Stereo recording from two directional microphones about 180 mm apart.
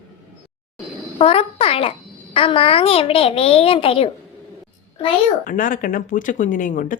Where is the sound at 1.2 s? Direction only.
30° left (ahead or behind).